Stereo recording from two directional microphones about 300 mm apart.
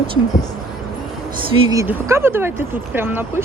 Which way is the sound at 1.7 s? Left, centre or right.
Centre.